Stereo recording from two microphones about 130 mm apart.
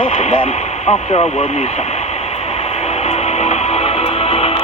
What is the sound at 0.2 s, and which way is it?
Speech, 60° left (ahead or behind).